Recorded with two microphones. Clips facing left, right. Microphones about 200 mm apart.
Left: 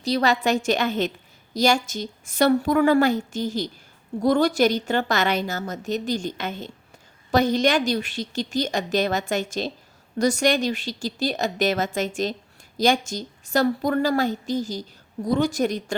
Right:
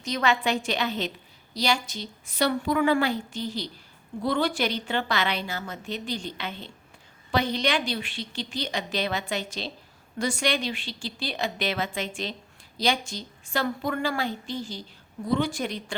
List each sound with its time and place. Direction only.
0.0 s a woman's voice: 35° left (ahead or behind)